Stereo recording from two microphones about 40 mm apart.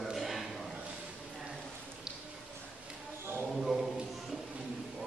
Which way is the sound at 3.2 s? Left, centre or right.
Right.